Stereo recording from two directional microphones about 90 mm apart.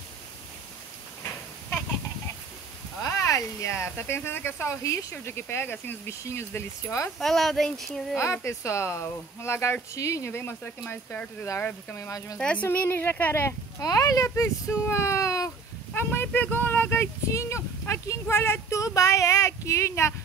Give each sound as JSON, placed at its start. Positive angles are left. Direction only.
{"t": 3.0, "sound": "speech", "side_deg": 35}
{"t": 7.2, "sound": "speech", "side_deg": 0}
{"t": 8.2, "sound": "speech", "side_deg": 35}
{"t": 12.4, "sound": "a woman's voice", "side_deg": 15}
{"t": 13.7, "sound": "speech", "side_deg": 40}
{"t": 15.9, "sound": "a sound", "side_deg": 25}
{"t": 16.3, "sound": "speech", "side_deg": 20}